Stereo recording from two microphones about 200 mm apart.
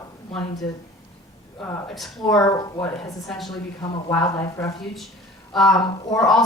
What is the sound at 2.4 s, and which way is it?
Speech, 15° left (ahead or behind).